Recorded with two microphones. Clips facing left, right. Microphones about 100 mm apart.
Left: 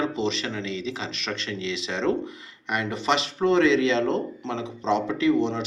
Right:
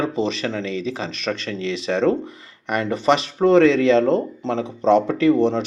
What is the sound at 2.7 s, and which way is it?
Speech, 45° right (ahead or behind).